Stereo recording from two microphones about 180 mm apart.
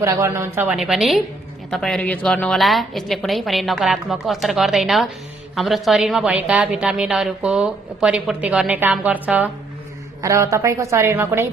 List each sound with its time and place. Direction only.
0.0 s a woman's voice: 15° right (ahead or behind)